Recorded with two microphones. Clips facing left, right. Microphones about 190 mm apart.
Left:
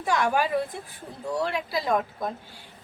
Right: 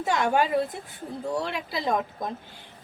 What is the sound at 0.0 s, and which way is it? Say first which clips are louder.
A woman's voice: right 1 dB; 25° right (ahead or behind).